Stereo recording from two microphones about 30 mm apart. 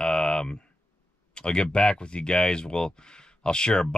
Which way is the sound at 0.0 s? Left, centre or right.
Left.